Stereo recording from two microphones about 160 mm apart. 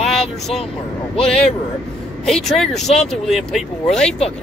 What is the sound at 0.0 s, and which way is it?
Vehicle, centre (ahead or behind).